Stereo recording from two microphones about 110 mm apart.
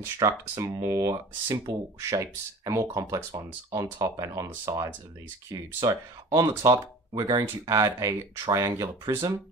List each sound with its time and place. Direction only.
0.0 s speech: 30° right (ahead or behind)